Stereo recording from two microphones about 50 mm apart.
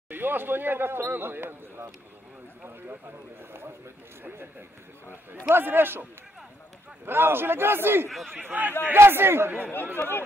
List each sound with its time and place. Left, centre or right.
0.1 s speech: right
3.5 s speech: right
5.5 s speech: right
7.1 s speech: right
8.4 s a man's voice: right
8.8 s speech: right
9.9 s speech: left